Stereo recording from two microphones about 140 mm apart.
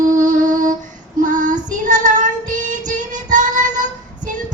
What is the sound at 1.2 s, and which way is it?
Child singing, 65° right (ahead or behind).